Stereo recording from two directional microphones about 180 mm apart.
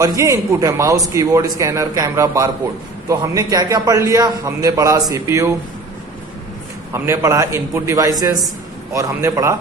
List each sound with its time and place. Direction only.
0.0 s a man's voice: 15° right (ahead or behind)
6.9 s a man's voice: 15° right (ahead or behind)